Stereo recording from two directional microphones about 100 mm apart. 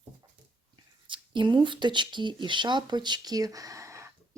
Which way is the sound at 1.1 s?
55° right (ahead or behind).